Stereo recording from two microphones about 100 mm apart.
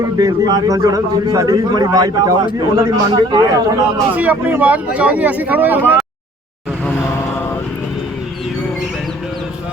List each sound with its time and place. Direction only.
0.0 s a man's voice: 40° right (ahead or behind)
4.1 s speech: 15° right (ahead or behind)